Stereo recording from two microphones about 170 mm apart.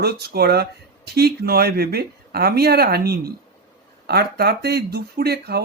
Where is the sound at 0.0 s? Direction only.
70° right (ahead or behind).